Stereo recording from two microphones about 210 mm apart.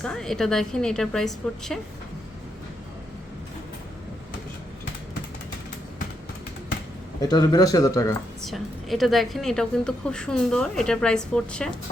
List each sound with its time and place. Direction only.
0.0 s a woman's voice: 5° left (ahead or behind)
7.2 s speech: 20° left (ahead or behind)
8.4 s a woman's voice: centre (ahead or behind)